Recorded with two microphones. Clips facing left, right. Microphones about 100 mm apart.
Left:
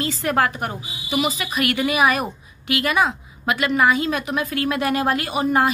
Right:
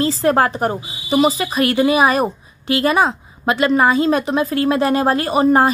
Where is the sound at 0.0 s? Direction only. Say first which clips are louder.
Right 6 dB; 30° right (ahead or behind).